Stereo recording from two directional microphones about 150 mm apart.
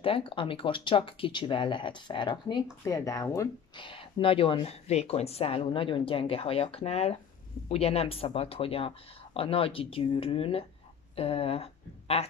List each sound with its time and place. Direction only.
0.0 s speech: 35° left (ahead or behind)